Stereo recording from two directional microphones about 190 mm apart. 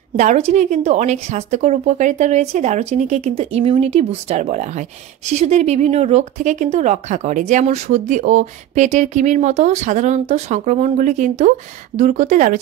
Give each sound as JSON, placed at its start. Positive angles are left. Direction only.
{"t": 0.2, "sound": "speech", "side_deg": -40}